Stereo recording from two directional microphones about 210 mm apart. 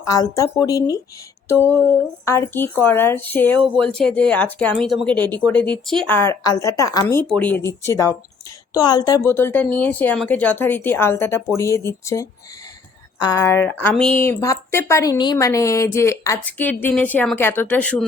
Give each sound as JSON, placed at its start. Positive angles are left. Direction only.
{"t": 0.1, "sound": "a woman's voice", "side_deg": 15}